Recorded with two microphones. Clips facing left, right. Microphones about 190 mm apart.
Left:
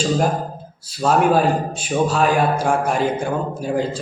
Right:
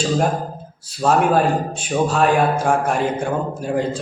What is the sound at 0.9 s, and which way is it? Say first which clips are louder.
A man's voice: even; centre (ahead or behind).